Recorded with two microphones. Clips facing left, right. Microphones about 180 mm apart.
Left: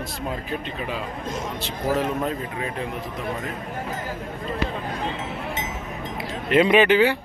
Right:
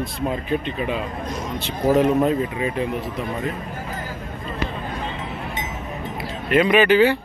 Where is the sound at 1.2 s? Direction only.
25° left (ahead or behind).